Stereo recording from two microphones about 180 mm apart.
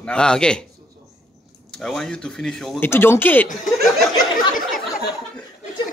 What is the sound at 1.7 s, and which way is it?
A man's voice, 5° left (ahead or behind).